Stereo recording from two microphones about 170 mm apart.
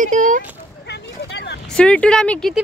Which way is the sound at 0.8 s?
80° left.